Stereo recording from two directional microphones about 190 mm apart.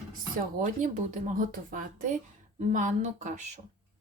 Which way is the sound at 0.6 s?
40° right (ahead or behind).